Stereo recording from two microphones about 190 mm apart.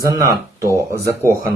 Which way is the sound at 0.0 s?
15° right (ahead or behind).